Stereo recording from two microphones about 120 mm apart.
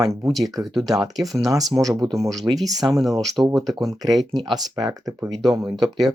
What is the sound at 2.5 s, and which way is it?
Speech, 20° right (ahead or behind).